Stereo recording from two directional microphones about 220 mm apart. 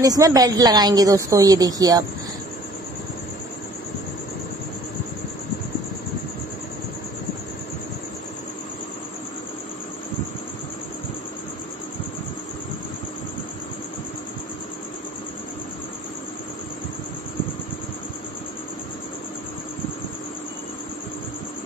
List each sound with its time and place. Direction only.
0.0 s speech: 15° right (ahead or behind)